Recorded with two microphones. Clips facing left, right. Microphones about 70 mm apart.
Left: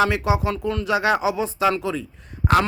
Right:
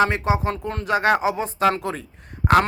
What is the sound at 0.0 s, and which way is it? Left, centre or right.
Speech, right.